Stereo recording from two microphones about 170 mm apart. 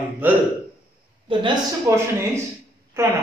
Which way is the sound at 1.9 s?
15° right (ahead or behind).